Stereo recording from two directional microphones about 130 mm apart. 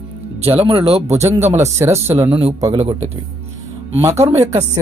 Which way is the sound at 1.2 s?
20° right (ahead or behind).